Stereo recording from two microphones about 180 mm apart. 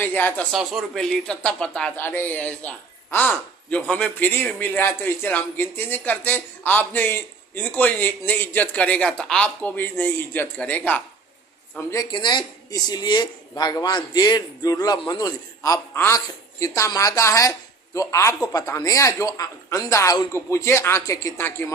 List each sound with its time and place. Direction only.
0.0 s speech: 10° left (ahead or behind)
0.5 s a woman's voice: centre (ahead or behind)